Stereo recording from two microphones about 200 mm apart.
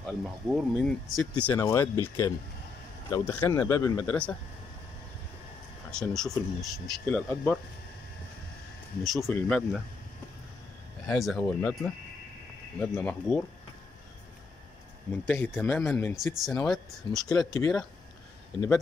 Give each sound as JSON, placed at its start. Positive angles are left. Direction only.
{"t": 0.0, "sound": "speech", "side_deg": 0}
{"t": 1.4, "sound": "speech", "side_deg": 15}
{"t": 5.9, "sound": "speech", "side_deg": 5}
{"t": 9.0, "sound": "speech", "side_deg": 0}
{"t": 11.1, "sound": "speech", "side_deg": 0}
{"t": 15.0, "sound": "speech", "side_deg": 10}
{"t": 17.5, "sound": "speech", "side_deg": 15}